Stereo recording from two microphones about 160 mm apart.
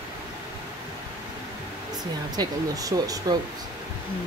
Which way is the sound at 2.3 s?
25° right (ahead or behind).